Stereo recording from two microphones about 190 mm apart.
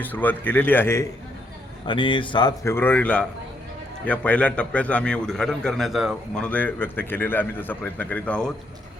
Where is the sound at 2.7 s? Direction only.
10° left (ahead or behind).